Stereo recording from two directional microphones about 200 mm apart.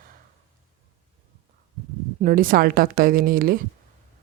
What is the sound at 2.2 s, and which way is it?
Speech, 45° right (ahead or behind).